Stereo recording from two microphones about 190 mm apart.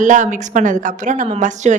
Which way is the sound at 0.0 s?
40° right (ahead or behind).